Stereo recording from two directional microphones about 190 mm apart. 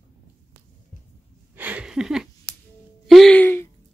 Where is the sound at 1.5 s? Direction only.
5° right (ahead or behind); by 3.6 s 10° left (ahead or behind).